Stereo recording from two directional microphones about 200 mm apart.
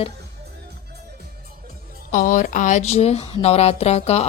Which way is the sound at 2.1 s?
40° left (ahead or behind).